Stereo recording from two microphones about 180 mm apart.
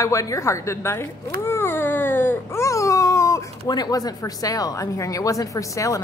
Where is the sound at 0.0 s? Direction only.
15° left (ahead or behind).